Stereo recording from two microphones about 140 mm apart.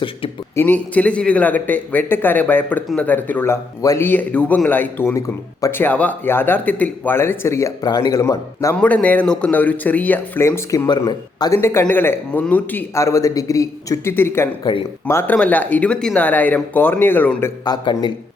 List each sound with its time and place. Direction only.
0.5 s a man's voice: 15° left (ahead or behind)
5.8 s a man's voice: 10° left (ahead or behind)
8.7 s a man's voice: 10° left (ahead or behind)
10.8 s a man's voice: 30° left (ahead or behind); by 17.5 s 15° left (ahead or behind)
17.7 s a man's voice: 30° left (ahead or behind)